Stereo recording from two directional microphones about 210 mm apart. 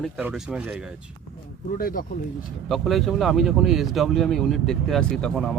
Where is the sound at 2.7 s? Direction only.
Centre (ahead or behind).